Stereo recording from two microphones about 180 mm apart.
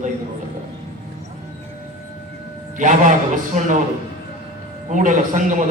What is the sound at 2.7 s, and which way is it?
Speech, 45° right (ahead or behind).